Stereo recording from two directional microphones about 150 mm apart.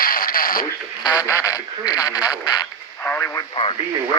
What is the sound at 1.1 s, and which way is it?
Speech, 20° left (ahead or behind).